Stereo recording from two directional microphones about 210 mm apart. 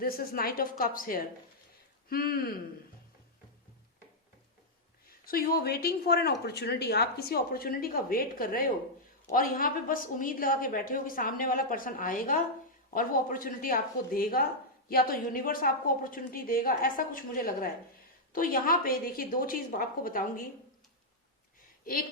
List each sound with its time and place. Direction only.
0.0 s speech: 45° left (ahead or behind)
5.0 s a woman's voice: 45° left (ahead or behind)